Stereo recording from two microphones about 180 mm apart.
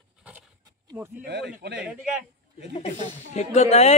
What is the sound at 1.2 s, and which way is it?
Speech, 80° right.